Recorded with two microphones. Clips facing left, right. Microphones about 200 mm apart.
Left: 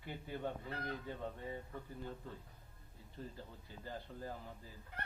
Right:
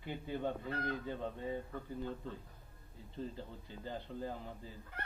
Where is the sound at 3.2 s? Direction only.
25° right (ahead or behind).